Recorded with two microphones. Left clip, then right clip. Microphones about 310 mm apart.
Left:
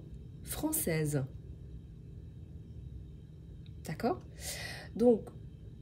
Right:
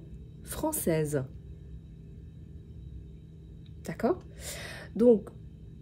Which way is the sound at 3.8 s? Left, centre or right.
Centre.